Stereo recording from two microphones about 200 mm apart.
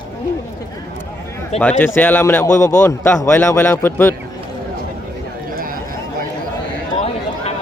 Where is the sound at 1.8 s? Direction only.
10° left (ahead or behind).